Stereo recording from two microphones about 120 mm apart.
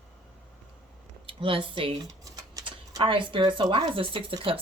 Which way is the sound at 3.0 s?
45° right (ahead or behind).